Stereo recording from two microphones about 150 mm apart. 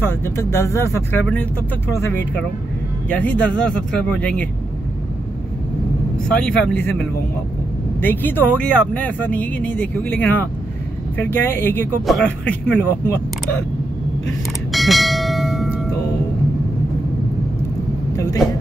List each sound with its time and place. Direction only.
0.0 s speech: 15° left (ahead or behind)
6.3 s speech: 5° left (ahead or behind)
14.7 s bell: centre (ahead or behind)
18.1 s vehicle: 20° left (ahead or behind)